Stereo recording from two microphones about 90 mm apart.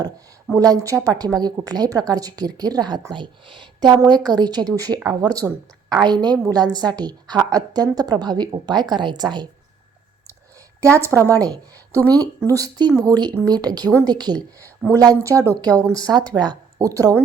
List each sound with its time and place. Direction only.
0.5 s speech: 40° right (ahead or behind)
1.1 s a woman's voice: 50° right (ahead or behind)
3.1 s a woman's voice: 65° right (ahead or behind)
10.8 s speech: 30° right (ahead or behind)
11.3 s a woman's voice: 45° right (ahead or behind)
16.7 s speech: 40° right (ahead or behind)